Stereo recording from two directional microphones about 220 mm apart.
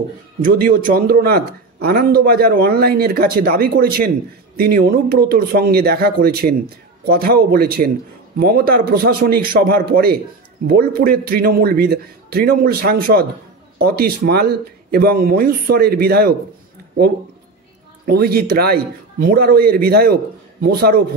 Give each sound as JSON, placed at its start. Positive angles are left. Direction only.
{"t": 0.4, "sound": "a man's voice", "side_deg": -40}
{"t": 18.0, "sound": "a man's voice", "side_deg": -45}